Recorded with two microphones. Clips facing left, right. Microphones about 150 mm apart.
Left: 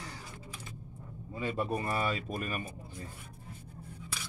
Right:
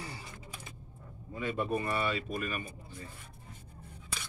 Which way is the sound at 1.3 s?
35° left (ahead or behind).